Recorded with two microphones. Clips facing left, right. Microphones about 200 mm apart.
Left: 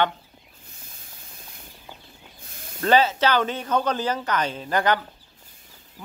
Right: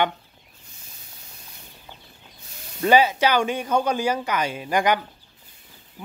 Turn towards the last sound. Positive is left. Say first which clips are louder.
# right 1 dB
turn(degrees=-15)  # may be behind; listen again after turning